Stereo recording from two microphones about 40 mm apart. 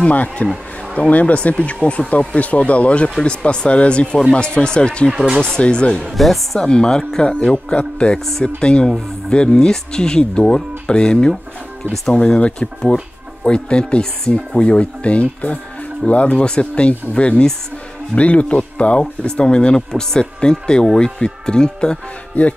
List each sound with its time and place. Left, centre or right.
0.0 s speech: left
5.1 s speech: right
5.4 s speech: left
6.1 s speech: centre
6.6 s speech: centre
7.7 s speech: left
22.3 s speech: left